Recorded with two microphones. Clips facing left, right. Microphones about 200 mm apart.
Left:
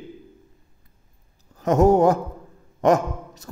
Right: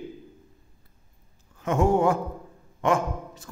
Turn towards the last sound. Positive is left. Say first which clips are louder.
# left 1 dB
turn(degrees=40)  # may be behind; listen again after turning